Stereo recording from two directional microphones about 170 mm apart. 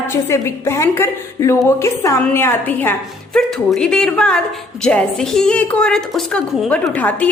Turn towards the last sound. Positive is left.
turn(degrees=10)  # may be behind; listen again after turning